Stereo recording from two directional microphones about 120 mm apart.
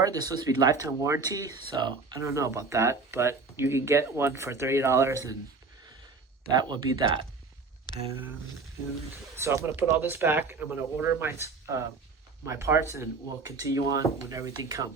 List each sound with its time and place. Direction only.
0.0 s speech: 30° right (ahead or behind)
6.7 s speech: 40° right (ahead or behind)
9.3 s speech: 25° right (ahead or behind)